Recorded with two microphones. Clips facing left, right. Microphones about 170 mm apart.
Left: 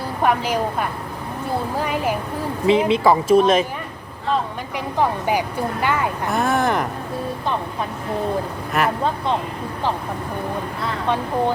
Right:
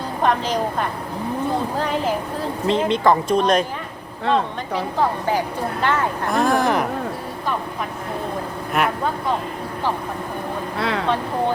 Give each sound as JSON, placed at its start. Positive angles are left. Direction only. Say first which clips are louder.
{"t": 0.2, "sound": "a woman's voice", "louder": "even", "side_deg": 10}
{"t": 4.7, "sound": "a woman's voice", "louder": "even", "side_deg": 15}
{"t": 8.8, "sound": "speech", "louder": "even", "side_deg": 0}
{"t": 10.8, "sound": "speech", "louder": "right 4 dB", "side_deg": -80}